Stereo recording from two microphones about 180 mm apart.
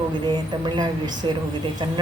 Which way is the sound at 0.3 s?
25° right (ahead or behind).